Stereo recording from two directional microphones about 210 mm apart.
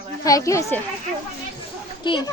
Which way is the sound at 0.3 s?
15° left (ahead or behind).